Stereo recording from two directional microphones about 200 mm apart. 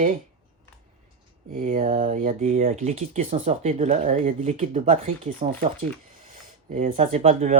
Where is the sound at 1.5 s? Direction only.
35° right (ahead or behind).